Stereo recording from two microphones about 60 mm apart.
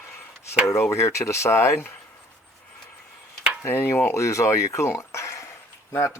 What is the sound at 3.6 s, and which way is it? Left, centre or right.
Speech, left.